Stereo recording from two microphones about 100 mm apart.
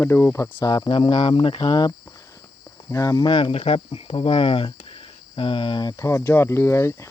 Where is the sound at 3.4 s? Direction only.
70° left (ahead or behind).